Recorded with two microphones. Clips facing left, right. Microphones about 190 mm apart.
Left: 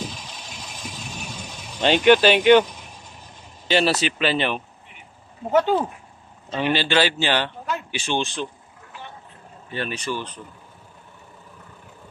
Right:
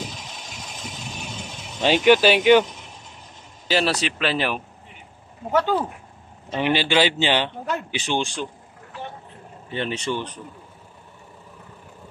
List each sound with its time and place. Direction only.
1.8 s a man's voice: 5° right (ahead or behind)
3.6 s speech: centre (ahead or behind)
5.5 s speech: 15° left (ahead or behind)
6.5 s a man's voice: 15° right (ahead or behind)
9.7 s speech: 25° right (ahead or behind)